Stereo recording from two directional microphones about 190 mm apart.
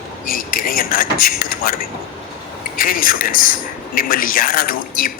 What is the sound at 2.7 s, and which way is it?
Speech, 50° left (ahead or behind).